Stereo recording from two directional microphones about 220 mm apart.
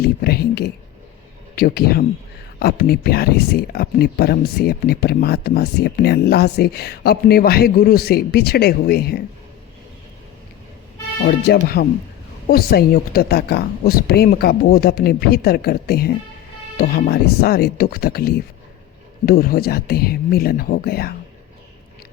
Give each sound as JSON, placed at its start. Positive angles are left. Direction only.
{"t": 0.0, "sound": "speech", "side_deg": 45}
{"t": 11.3, "sound": "speech", "side_deg": 45}